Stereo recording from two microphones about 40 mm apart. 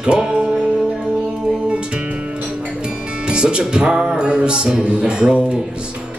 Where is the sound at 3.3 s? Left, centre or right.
Right.